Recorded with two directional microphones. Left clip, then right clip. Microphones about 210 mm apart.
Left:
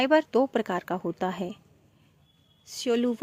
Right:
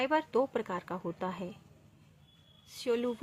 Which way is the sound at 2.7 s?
35° left (ahead or behind).